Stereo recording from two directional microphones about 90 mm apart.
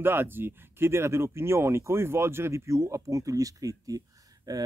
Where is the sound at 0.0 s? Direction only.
25° right (ahead or behind).